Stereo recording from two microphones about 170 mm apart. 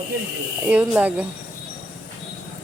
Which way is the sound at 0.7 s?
10° right (ahead or behind).